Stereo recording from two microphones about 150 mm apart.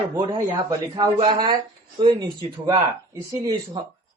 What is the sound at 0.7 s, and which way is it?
Speech, 30° right (ahead or behind).